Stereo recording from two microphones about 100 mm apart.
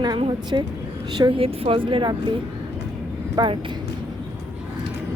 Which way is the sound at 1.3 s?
70° right (ahead or behind).